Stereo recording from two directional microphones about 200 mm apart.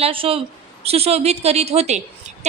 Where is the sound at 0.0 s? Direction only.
30° right (ahead or behind).